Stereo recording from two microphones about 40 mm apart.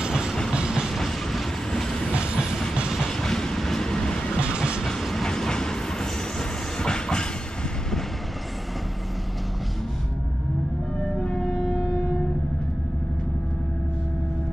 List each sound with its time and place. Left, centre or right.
0.0 s vehicle: centre
0.7 s train: centre
0.9 s train: centre
3.1 s train: centre
4.4 s train: right
4.8 s train: centre
11.1 s siren: centre